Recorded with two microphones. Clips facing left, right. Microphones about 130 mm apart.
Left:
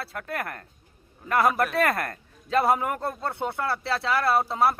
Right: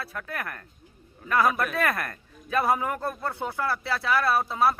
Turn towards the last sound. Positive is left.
turn(degrees=25)  # may be behind; listen again after turning